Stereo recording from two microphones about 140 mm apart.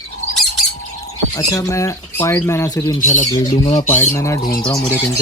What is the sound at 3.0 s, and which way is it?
Speech, 65° left (ahead or behind).